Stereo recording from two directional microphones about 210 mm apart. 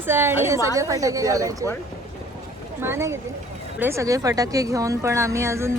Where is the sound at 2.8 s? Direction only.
10° right (ahead or behind).